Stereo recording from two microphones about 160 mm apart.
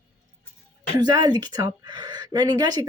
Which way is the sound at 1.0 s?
25° right (ahead or behind).